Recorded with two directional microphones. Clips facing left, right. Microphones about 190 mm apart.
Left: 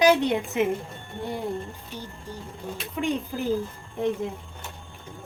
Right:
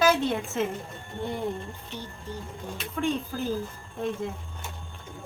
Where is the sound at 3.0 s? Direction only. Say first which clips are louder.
Left 1 dB; 15° left (ahead or behind).